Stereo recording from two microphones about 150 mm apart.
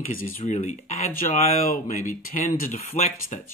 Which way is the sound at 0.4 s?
45° left (ahead or behind).